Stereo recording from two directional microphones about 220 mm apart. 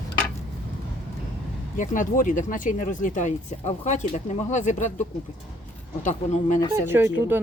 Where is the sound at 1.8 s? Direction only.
35° left (ahead or behind).